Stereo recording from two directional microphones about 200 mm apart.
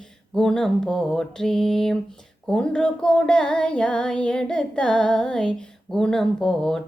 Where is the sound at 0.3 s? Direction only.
5° left (ahead or behind).